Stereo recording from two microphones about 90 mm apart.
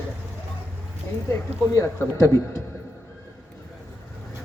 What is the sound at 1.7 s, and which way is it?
Speech, 30° left (ahead or behind).